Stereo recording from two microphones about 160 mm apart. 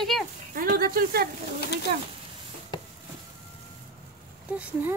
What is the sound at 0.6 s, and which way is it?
Speech, 70° right (ahead or behind).